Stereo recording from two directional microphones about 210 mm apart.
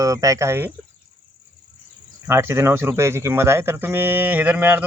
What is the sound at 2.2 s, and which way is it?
Speech, 10° right (ahead or behind).